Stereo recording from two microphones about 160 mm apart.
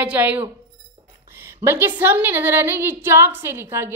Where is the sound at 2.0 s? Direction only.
10° right (ahead or behind).